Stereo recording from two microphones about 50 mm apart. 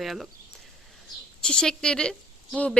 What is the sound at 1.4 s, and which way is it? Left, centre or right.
Speech, centre.